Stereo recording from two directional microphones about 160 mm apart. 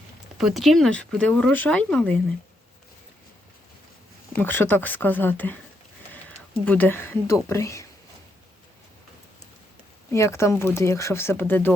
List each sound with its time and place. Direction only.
0.3 s speech: centre (ahead or behind)
4.4 s speech: 10° left (ahead or behind)
6.7 s speech: 10° left (ahead or behind)
10.1 s speech: 15° left (ahead or behind)